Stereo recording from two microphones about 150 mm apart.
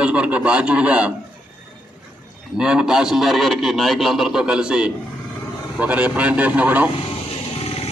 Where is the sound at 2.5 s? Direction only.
5° right (ahead or behind).